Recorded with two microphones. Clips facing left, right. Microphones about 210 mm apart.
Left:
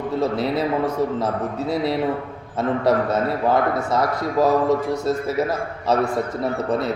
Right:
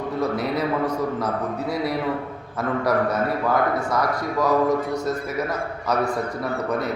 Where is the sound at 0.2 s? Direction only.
25° left (ahead or behind).